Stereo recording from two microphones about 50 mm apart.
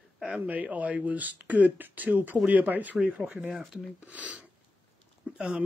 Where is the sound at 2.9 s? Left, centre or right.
Right.